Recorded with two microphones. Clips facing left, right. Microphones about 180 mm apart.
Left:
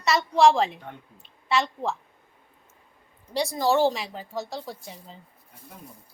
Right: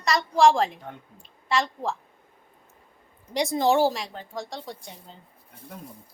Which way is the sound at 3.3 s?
20° right (ahead or behind).